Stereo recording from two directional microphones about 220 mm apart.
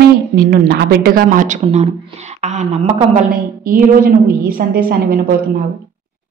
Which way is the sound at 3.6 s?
40° right (ahead or behind).